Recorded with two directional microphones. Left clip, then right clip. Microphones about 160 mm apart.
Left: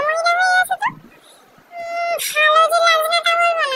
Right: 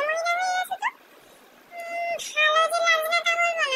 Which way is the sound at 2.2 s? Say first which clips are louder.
Left 7 dB; 25° left (ahead or behind).